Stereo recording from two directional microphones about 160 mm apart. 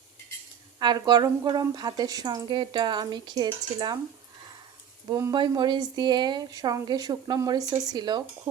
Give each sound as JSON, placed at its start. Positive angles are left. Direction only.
{"t": 0.8, "sound": "speech", "side_deg": -25}
{"t": 5.0, "sound": "speech", "side_deg": -25}